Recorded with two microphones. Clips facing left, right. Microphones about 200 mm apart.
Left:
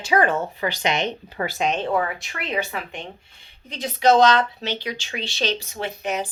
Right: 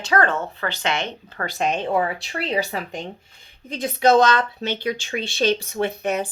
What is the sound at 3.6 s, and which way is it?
Speech, 50° right (ahead or behind).